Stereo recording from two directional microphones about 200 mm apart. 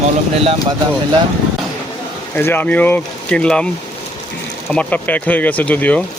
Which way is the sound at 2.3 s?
10° left (ahead or behind).